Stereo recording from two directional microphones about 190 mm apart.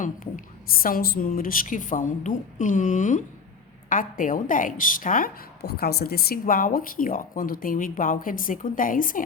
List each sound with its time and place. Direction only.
0.0 s a woman's voice: 45° left (ahead or behind)